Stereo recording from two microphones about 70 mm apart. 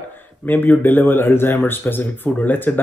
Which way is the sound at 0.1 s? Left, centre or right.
Left.